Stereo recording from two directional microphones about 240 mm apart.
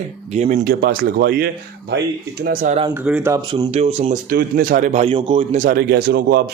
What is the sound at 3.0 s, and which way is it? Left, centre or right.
Speech, centre.